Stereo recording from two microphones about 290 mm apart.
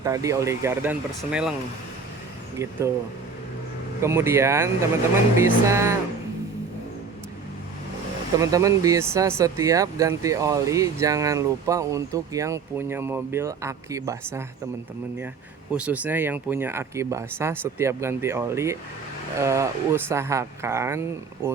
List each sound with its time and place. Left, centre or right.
0.0 s speech: centre
4.0 s speech: centre
8.4 s speech: centre
15.7 s speech: centre